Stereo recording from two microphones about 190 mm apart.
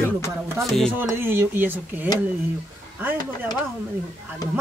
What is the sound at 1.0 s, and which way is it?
Speech, 10° right (ahead or behind).